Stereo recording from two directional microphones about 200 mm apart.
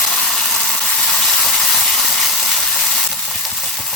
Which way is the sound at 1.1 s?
Centre (ahead or behind).